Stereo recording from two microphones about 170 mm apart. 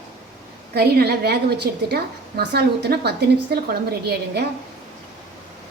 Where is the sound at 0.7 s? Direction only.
70° right (ahead or behind).